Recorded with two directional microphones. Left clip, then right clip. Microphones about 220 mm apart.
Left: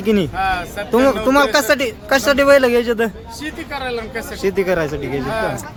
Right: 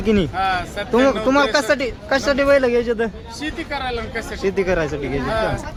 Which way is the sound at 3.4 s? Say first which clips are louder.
Even; centre (ahead or behind).